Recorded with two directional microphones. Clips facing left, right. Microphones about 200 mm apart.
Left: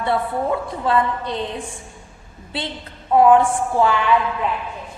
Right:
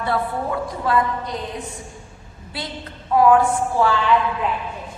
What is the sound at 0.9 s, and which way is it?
Speech, 30° left (ahead or behind).